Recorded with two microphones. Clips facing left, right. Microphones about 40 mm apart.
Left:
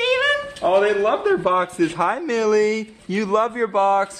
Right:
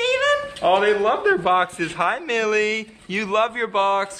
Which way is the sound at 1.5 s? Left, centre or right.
Right.